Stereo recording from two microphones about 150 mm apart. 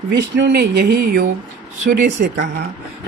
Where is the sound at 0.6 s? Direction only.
90° right.